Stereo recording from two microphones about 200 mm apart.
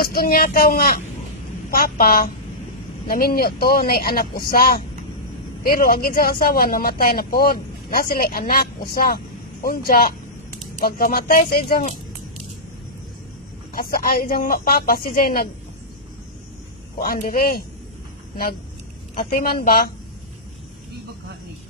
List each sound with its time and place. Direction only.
0.0 s speech: 45° left (ahead or behind)
13.7 s speech: 45° left (ahead or behind)
17.0 s speech: 45° left (ahead or behind)
19.3 s speech: 45° left (ahead or behind)